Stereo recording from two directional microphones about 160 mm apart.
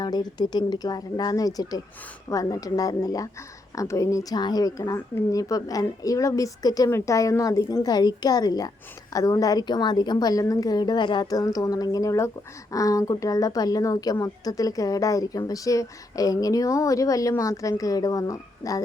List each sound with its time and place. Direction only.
0.0 s a woman's voice: 25° left (ahead or behind)